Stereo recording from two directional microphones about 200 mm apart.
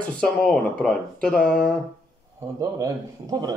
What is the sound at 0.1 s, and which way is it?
Speech, 5° left (ahead or behind).